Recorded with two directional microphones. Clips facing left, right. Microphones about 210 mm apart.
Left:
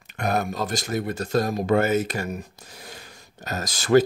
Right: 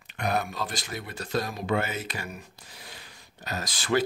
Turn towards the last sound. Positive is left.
turn(degrees=45)  # may be behind; listen again after turning